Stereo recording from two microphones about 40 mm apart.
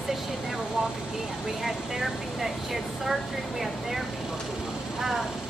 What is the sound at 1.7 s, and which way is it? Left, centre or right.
Vehicle, centre.